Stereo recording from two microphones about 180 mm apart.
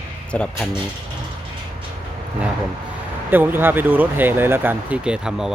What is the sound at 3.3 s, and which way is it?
Speech, 10° right (ahead or behind).